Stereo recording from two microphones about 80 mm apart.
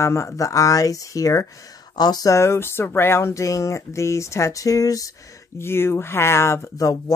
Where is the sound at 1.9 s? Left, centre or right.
Left.